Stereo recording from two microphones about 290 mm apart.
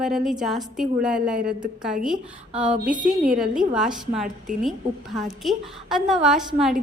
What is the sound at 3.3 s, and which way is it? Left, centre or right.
A woman's voice, centre.